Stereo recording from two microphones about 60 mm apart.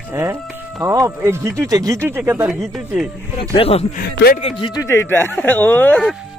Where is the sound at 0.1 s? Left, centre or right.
Right.